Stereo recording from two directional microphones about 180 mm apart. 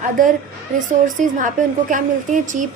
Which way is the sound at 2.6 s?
45° right (ahead or behind).